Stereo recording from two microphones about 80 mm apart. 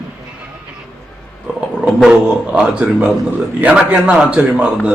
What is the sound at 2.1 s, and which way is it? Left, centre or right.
A man's voice, centre.